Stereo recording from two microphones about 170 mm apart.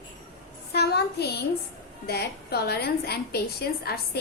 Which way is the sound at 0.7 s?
70° left (ahead or behind).